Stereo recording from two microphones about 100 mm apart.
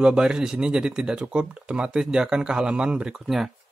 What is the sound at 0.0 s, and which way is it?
Speech, 10° right (ahead or behind).